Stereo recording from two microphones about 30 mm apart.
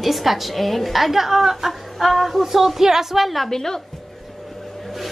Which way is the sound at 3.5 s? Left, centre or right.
Centre.